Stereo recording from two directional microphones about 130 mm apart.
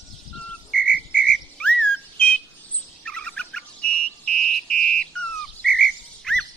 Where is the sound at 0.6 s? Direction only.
10° left (ahead or behind).